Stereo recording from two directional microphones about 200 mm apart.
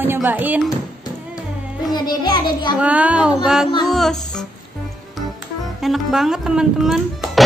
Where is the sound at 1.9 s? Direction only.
20° left (ahead or behind).